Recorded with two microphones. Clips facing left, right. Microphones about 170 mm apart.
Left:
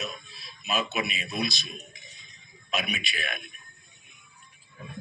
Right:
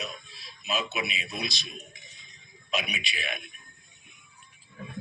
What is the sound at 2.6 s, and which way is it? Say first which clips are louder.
Speech: left 1 dB; 50° left (ahead or behind).